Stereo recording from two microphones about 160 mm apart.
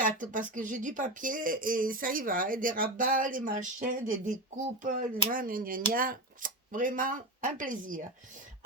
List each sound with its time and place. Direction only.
0.0 s speech: 55° right (ahead or behind)